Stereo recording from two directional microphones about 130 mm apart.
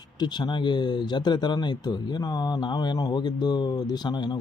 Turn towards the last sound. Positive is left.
turn(degrees=35)  # may be behind; listen again after turning